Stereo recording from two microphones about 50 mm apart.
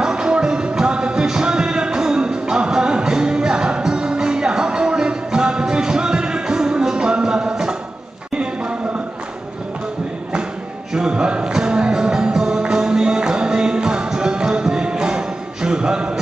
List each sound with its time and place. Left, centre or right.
0.0 s music: centre
8.4 s a sound: right
11.1 s music: centre